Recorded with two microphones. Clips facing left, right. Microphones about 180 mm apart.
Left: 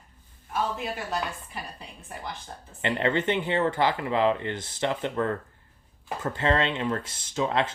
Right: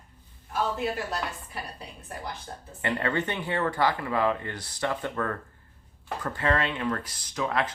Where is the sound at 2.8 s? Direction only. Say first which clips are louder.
Left 3 dB; 20° left (ahead or behind).